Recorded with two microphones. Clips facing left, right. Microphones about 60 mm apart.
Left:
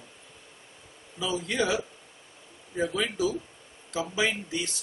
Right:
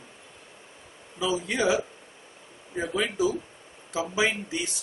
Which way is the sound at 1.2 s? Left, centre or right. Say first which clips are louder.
Right 3 dB; centre.